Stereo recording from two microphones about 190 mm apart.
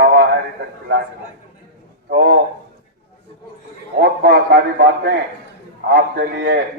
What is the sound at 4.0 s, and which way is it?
A man's voice, 60° right (ahead or behind).